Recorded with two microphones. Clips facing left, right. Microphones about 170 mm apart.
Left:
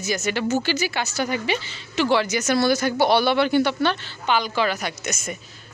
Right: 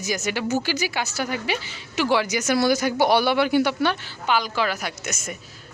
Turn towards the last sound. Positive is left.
turn(degrees=-5)  # may be behind; listen again after turning